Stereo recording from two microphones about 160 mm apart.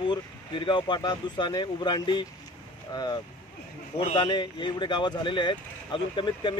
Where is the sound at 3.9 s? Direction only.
30° left (ahead or behind).